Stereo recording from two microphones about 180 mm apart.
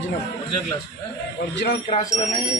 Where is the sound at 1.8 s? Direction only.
40° left (ahead or behind).